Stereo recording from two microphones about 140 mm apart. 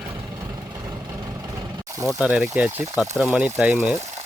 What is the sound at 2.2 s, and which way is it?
Speech, 10° right (ahead or behind).